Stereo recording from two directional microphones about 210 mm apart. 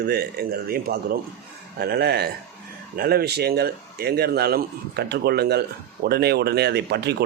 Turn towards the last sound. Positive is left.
turn(degrees=-50)  # may be behind; listen again after turning